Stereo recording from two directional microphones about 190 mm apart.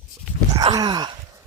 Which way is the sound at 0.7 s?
20° right (ahead or behind).